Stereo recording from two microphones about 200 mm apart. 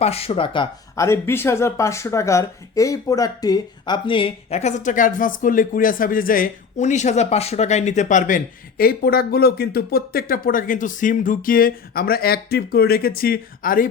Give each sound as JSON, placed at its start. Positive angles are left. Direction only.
{"t": 0.0, "sound": "speech", "side_deg": 30}